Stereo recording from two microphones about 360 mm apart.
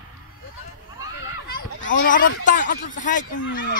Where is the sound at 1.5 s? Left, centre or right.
Left.